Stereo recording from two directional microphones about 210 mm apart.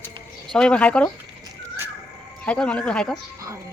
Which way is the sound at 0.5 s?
5° left (ahead or behind).